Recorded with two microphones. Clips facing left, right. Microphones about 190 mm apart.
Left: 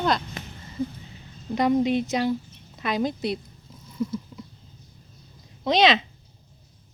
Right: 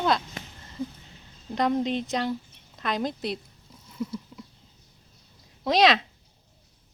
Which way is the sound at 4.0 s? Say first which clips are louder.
Left 4 dB; 5° right (ahead or behind).